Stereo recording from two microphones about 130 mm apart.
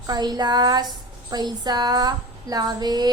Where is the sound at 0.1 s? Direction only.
30° right (ahead or behind).